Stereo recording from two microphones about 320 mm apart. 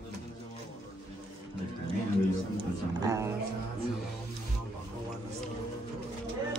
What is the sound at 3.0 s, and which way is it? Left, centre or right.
Speech, centre.